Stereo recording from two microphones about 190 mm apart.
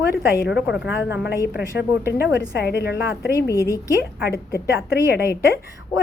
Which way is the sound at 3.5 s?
15° left (ahead or behind).